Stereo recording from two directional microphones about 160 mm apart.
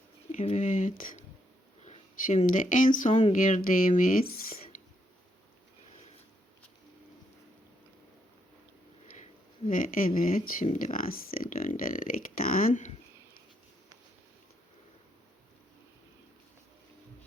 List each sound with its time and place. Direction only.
0.3 s speech: 45° left (ahead or behind)
9.1 s a sound: 55° left (ahead or behind)
10.2 s speech: 60° left (ahead or behind)